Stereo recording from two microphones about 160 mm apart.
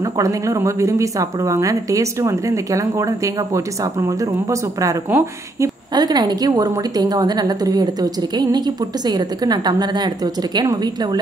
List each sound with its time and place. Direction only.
0.2 s speech: 20° right (ahead or behind)